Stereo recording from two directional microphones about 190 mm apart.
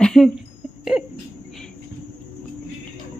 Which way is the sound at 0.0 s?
5° left (ahead or behind).